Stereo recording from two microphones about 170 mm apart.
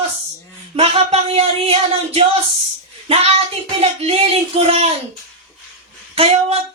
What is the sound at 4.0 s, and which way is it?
Speech, 35° right (ahead or behind).